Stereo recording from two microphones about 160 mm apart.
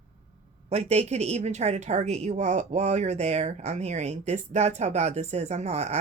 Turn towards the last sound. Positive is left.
turn(degrees=-40)  # may be behind; listen again after turning